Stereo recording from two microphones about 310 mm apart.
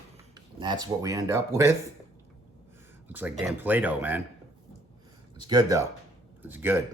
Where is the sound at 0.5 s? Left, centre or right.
Centre.